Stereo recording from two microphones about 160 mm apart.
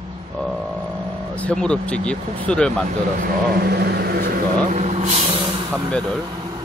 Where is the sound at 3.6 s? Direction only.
85° right.